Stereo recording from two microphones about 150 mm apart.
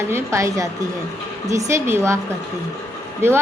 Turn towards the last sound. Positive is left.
turn(degrees=-15)  # may be behind; listen again after turning